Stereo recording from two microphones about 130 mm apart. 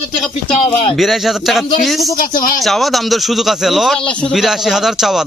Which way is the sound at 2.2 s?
90° left.